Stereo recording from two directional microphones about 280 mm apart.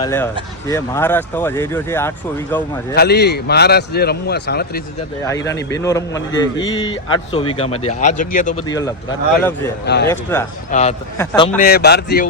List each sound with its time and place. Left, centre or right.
0.0 s speech: centre
2.9 s a man's voice: left
5.2 s a man's voice: centre; by 8.6 s left
8.6 s speech: centre
9.8 s a man's voice: left
10.1 s speech: centre
10.7 s a man's voice: left